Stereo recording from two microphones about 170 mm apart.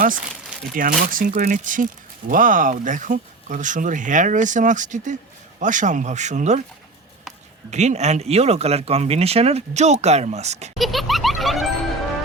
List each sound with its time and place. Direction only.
0.7 s speech: 55° right (ahead or behind)
7.7 s speech: 40° right (ahead or behind)
10.8 s music: centre (ahead or behind)